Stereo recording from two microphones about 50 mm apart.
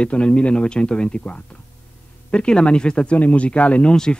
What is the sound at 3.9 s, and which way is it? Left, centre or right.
Speech, centre.